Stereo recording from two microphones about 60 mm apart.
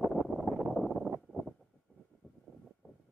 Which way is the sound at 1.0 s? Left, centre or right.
Right.